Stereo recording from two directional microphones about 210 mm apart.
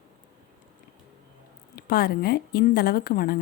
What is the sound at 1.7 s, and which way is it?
Speech, 45° left (ahead or behind).